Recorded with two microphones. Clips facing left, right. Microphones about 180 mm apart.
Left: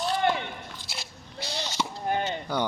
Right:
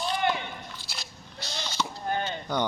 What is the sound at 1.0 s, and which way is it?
Biting, 30° left (ahead or behind).